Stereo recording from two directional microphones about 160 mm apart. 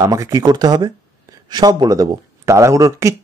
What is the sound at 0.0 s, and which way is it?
Speech, 20° right (ahead or behind).